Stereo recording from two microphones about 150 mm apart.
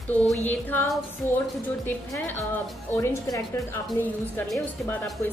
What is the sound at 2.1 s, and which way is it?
A woman's voice, 15° left (ahead or behind).